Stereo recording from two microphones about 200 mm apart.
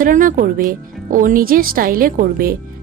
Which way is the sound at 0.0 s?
40° right (ahead or behind).